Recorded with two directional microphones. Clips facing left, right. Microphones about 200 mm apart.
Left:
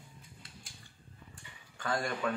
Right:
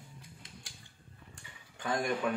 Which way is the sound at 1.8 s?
20° right (ahead or behind).